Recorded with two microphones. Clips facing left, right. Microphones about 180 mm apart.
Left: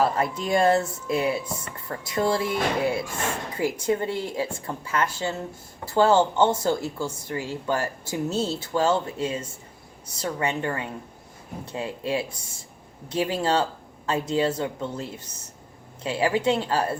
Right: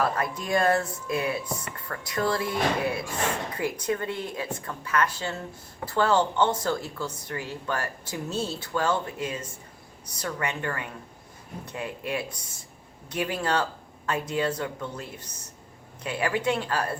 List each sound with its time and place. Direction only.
0.0 s a woman's voice: 25° left (ahead or behind)